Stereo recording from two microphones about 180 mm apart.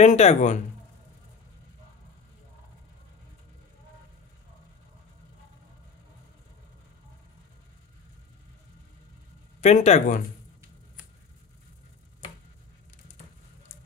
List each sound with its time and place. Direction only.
0.0 s speech: 40° left (ahead or behind)
9.6 s speech: 40° left (ahead or behind)